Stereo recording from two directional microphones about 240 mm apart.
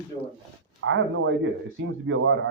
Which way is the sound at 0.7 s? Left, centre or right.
Right.